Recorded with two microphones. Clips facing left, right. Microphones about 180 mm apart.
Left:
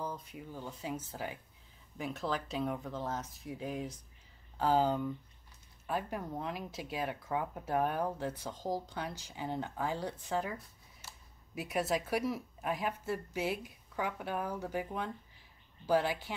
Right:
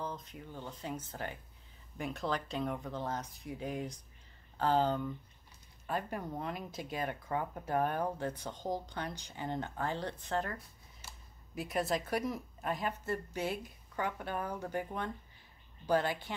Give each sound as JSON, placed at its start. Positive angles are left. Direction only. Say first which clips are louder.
{"t": 0.0, "sound": "speech", "louder": "left 1 dB", "side_deg": 10}